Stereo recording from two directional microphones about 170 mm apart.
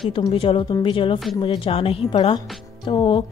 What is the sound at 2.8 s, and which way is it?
Music, 30° left (ahead or behind).